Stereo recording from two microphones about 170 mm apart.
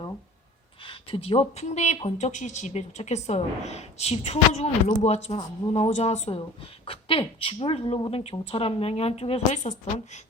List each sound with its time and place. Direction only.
0.9 s speech: 35° left (ahead or behind)